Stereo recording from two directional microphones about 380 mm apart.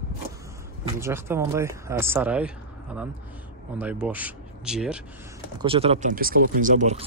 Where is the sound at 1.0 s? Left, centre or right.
Centre.